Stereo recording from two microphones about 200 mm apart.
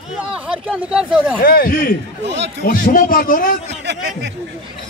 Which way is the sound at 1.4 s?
45° left (ahead or behind).